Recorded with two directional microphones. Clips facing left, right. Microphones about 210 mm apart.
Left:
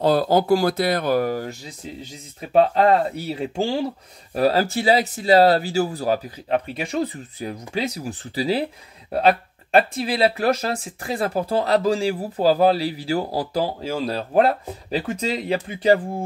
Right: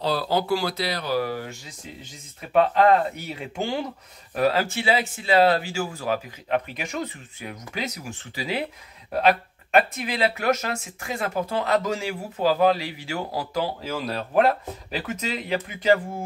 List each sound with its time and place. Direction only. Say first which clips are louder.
0.0 s speech: left 6 dB; 45° left (ahead or behind)